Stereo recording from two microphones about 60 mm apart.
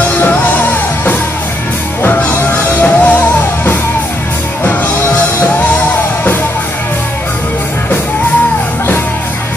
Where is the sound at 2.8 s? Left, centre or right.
Left.